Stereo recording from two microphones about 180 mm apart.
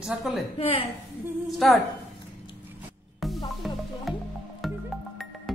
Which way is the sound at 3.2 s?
Centre (ahead or behind).